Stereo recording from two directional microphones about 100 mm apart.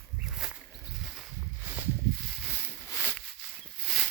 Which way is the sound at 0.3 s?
5° right (ahead or behind).